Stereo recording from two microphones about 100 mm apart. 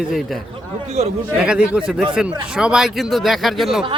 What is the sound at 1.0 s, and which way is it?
Speech, 90° right.